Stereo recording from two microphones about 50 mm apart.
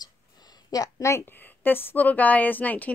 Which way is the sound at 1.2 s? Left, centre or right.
Left.